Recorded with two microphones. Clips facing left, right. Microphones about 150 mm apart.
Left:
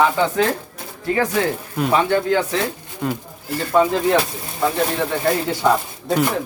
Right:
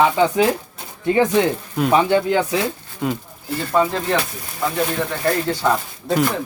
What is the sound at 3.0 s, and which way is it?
Speech, centre (ahead or behind).